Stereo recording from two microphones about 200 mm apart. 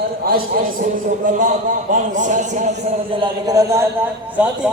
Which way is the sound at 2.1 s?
40° right (ahead or behind).